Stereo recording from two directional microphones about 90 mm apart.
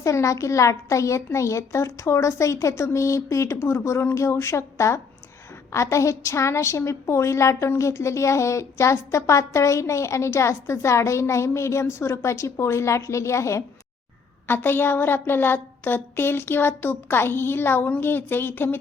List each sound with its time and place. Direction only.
0.0 s a woman's voice: 35° left (ahead or behind)
14.4 s a woman's voice: 25° left (ahead or behind)